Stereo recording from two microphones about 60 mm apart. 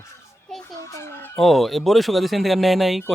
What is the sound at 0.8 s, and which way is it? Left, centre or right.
Fowl, left.